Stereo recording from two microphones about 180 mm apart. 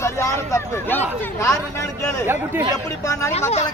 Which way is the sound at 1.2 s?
15° left (ahead or behind).